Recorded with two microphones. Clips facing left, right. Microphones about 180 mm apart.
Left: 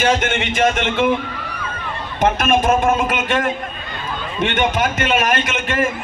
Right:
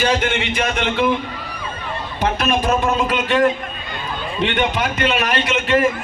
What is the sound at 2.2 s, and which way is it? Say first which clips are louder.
A man's voice: left 3 dB; 50° left (ahead or behind).